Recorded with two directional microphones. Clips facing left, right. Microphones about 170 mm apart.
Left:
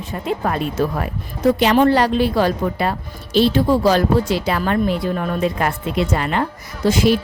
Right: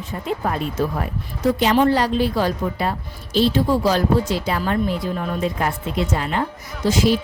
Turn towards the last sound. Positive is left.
turn(degrees=60)  # may be behind; listen again after turning